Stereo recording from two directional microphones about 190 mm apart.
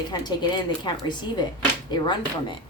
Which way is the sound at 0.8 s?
25° left (ahead or behind).